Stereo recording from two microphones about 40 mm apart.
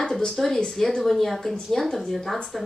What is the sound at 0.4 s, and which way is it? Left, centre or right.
A woman's voice, centre.